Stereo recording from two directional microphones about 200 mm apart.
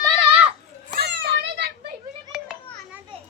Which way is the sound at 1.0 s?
55° right (ahead or behind).